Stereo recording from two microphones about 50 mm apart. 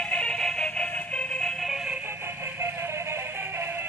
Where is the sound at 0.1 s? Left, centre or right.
Left.